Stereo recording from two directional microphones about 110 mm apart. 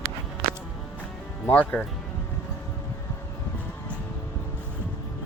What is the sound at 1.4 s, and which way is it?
Speech, 20° left (ahead or behind).